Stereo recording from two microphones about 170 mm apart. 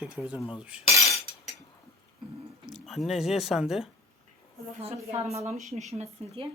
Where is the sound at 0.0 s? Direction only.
5° right (ahead or behind).